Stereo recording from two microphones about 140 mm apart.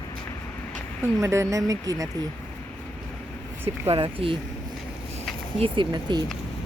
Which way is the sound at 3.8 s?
40° right (ahead or behind).